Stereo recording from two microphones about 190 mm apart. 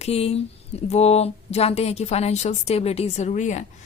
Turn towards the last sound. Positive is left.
turn(degrees=40)  # may be behind; listen again after turning